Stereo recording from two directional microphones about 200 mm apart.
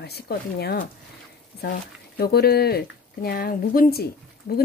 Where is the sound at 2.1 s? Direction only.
50° left (ahead or behind).